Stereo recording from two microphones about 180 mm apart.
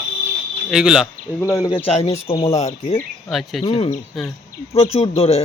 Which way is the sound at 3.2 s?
Centre (ahead or behind).